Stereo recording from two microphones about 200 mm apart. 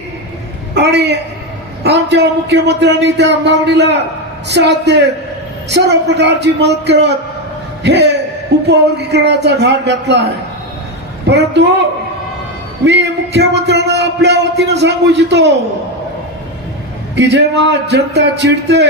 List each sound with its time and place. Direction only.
0.7 s speech: 60° right (ahead or behind)
11.3 s speech: 60° right (ahead or behind)
12.8 s speech: 60° right (ahead or behind)
17.2 s speech: 60° right (ahead or behind)